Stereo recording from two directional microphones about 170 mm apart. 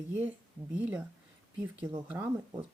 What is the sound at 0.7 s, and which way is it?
Speech, 10° right (ahead or behind).